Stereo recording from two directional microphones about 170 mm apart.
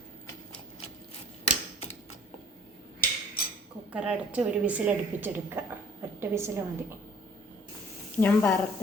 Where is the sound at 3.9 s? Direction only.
5° right (ahead or behind).